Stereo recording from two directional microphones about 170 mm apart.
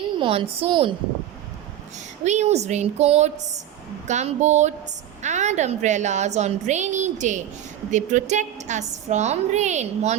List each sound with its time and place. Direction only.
0.2 s a woman's voice: 35° right (ahead or behind)
2.2 s a woman's voice: 40° right (ahead or behind)